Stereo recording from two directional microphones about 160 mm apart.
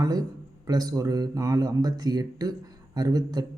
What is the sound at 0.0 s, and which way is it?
Speech, 20° right (ahead or behind).